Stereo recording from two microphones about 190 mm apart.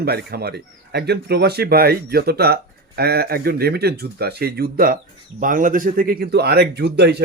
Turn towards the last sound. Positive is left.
turn(degrees=-60)  # may be behind; listen again after turning